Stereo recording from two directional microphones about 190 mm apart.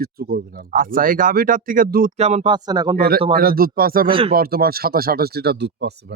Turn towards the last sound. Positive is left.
turn(degrees=-55)  # may be behind; listen again after turning